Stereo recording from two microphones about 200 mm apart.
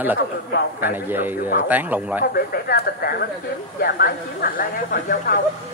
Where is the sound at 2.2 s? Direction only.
50° left (ahead or behind).